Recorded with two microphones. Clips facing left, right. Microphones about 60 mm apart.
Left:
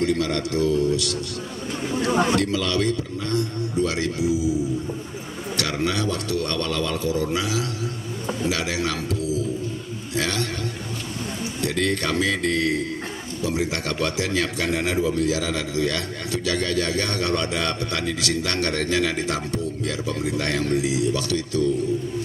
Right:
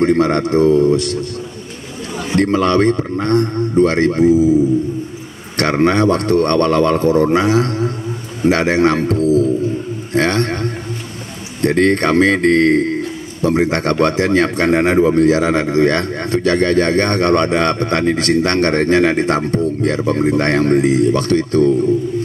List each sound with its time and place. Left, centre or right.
0.0 s a man's voice: right
2.0 s a sound: left
2.3 s a man's voice: right